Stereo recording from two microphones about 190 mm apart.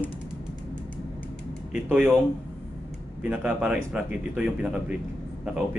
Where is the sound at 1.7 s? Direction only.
5° right (ahead or behind).